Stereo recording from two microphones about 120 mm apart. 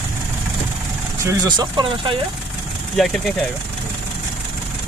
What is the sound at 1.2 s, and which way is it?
Speech, 25° right (ahead or behind).